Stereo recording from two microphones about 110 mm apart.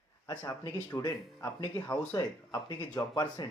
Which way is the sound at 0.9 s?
25° left (ahead or behind).